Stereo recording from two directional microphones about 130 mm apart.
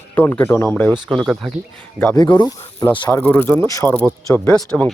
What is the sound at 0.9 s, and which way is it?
Speech, 35° right (ahead or behind).